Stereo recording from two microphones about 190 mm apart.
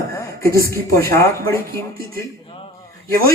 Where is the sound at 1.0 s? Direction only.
15° left (ahead or behind).